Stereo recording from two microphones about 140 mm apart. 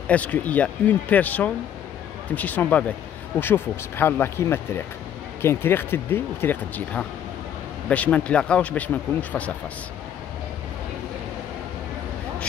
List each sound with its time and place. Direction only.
0.1 s speech: 10° left (ahead or behind)